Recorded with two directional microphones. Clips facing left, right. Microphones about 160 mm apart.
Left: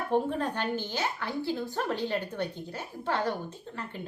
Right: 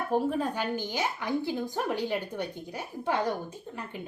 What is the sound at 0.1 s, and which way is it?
A woman's voice, 5° right (ahead or behind).